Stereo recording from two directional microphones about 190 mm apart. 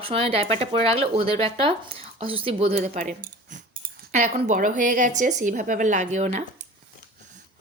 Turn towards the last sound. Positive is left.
turn(degrees=-35)  # may be behind; listen again after turning